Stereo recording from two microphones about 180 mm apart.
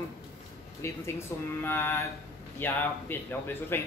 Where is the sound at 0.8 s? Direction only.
15° left (ahead or behind).